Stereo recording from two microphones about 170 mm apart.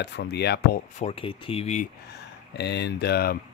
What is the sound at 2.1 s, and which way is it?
Speech, 80° left.